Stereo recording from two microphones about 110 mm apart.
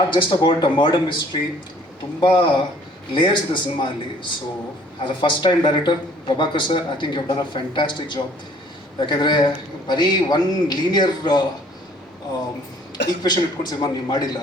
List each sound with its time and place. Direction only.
0.1 s speech: 45° left (ahead or behind)
13.2 s speech: 40° left (ahead or behind)